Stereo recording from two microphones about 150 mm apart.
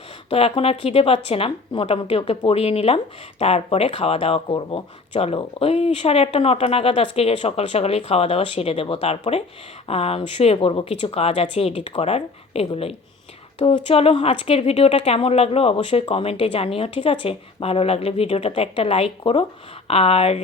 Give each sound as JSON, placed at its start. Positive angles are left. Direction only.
{"t": 0.3, "sound": "speech", "side_deg": 40}